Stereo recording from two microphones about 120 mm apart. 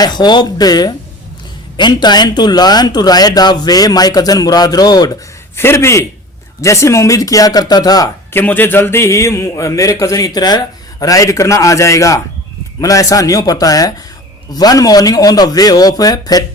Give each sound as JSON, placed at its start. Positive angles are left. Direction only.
{"t": 0.0, "sound": "speech", "side_deg": 35}
{"t": 5.5, "sound": "a man's voice", "side_deg": 20}
{"t": 8.3, "sound": "a man's voice", "side_deg": 15}